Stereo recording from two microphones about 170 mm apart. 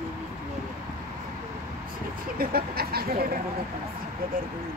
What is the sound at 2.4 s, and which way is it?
Speech, 60° right (ahead or behind).